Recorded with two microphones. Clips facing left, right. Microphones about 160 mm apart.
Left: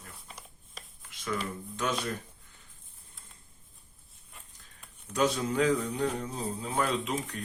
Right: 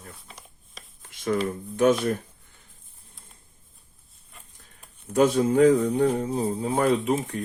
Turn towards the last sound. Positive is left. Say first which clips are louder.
# right 9 dB
turn(degrees=-50)  # may be behind; listen again after turning